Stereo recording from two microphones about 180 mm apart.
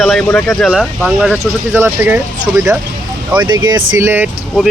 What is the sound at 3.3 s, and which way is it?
Speech, 25° right (ahead or behind).